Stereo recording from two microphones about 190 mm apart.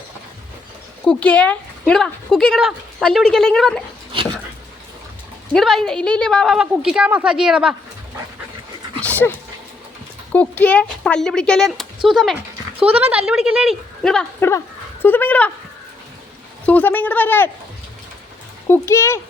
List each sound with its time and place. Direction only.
1.0 s speech: 5° left (ahead or behind)
5.5 s speech: centre (ahead or behind)
9.0 s dog: 10° left (ahead or behind)
10.3 s speech: 5° left (ahead or behind)
16.6 s speech: 10° left (ahead or behind)
18.7 s speech: 15° left (ahead or behind)